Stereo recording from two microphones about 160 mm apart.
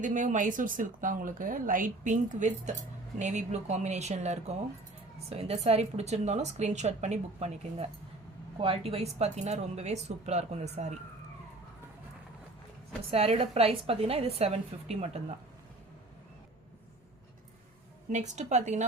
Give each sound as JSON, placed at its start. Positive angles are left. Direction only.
{"t": 0.0, "sound": "a woman's voice", "side_deg": -50}
{"t": 13.1, "sound": "a woman's voice", "side_deg": -40}
{"t": 18.1, "sound": "a woman's voice", "side_deg": -45}